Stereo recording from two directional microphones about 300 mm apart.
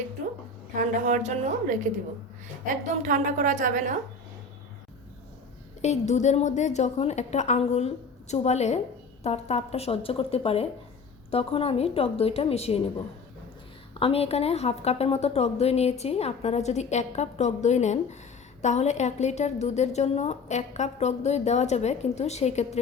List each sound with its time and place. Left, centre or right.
0.8 s a woman's voice: right
3.0 s a woman's voice: right
5.8 s a woman's voice: left
14.0 s a woman's voice: centre